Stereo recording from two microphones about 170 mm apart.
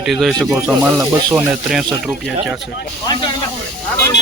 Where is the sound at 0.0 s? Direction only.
Centre (ahead or behind).